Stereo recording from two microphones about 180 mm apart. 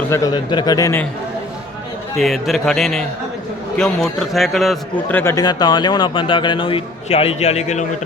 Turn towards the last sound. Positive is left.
turn(degrees=40)  # may be behind; listen again after turning